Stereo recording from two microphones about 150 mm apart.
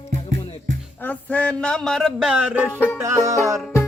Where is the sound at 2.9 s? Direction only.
20° right (ahead or behind).